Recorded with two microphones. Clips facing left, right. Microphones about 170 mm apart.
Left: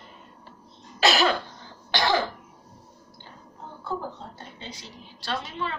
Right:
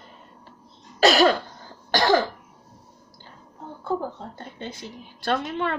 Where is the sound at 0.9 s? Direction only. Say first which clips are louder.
Right 5 dB; 40° right (ahead or behind).